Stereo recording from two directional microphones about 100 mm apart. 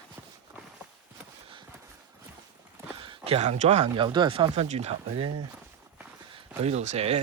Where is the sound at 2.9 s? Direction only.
60° right (ahead or behind); by 4.0 s 90° right.